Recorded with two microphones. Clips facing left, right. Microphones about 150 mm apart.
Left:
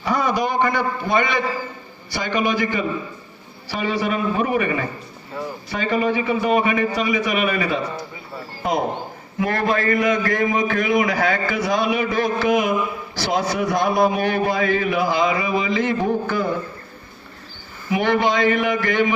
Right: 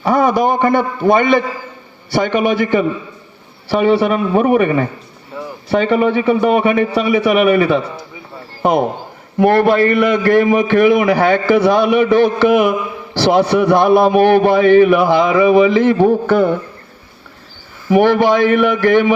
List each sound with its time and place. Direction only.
0.0 s a man's voice: 55° right (ahead or behind)
9.4 s a man's voice: 70° right (ahead or behind)
18.4 s a man's voice: 70° right (ahead or behind)